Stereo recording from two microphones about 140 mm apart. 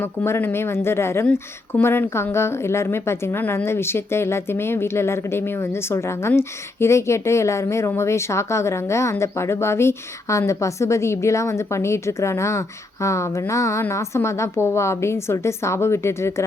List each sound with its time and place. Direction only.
0.0 s speech: 15° left (ahead or behind)